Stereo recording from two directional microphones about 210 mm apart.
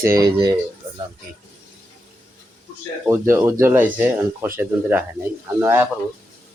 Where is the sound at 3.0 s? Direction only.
10° right (ahead or behind).